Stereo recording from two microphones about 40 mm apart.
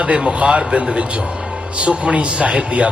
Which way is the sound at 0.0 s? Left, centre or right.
Right.